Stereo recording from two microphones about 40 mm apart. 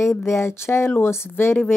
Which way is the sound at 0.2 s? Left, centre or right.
Left.